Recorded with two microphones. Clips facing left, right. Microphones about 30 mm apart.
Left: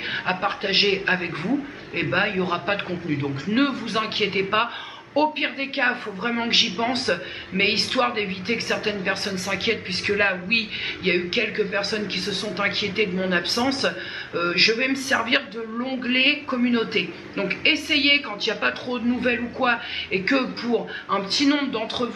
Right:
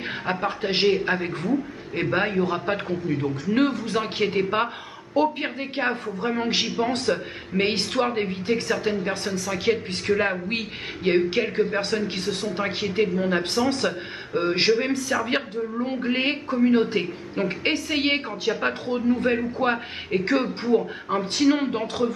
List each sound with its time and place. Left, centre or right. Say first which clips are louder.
0.3 s a woman's voice: left 1 dB; left
12.0 s a woman's voice: even; left